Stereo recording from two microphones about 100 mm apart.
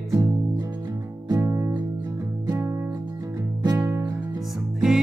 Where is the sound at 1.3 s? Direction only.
30° right (ahead or behind).